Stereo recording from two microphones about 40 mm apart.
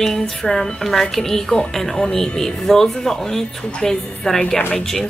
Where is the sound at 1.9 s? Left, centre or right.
Centre.